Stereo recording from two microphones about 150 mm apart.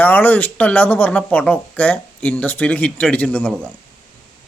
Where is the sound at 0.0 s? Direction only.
10° left (ahead or behind).